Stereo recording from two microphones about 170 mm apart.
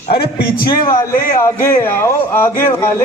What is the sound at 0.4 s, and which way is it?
Speech, 60° left (ahead or behind).